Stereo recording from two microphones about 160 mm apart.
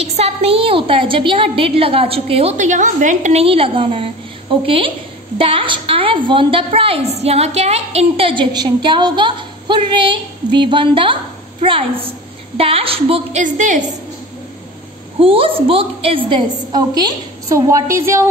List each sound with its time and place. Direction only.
0.0 s a woman's voice: 40° right (ahead or behind)
13.4 s a woman's voice: 55° right (ahead or behind)
15.1 s a woman's voice: 35° right (ahead or behind); by 18.2 s 15° right (ahead or behind)